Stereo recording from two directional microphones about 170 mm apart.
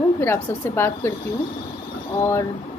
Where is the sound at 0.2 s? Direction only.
15° left (ahead or behind).